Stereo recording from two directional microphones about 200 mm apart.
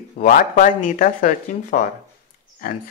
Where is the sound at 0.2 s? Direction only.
40° left (ahead or behind).